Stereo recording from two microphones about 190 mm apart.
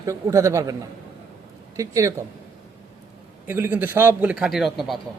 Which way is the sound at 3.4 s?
10° right (ahead or behind).